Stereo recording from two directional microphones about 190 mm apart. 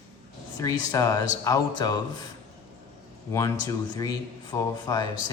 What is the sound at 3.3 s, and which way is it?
A man's voice, 15° left (ahead or behind).